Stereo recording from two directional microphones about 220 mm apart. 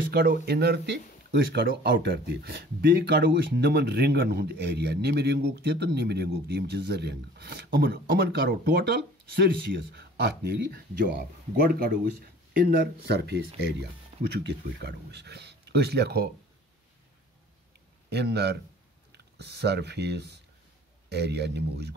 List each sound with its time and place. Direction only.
0.1 s speech: 45° right (ahead or behind)
18.1 s speech: 50° right (ahead or behind)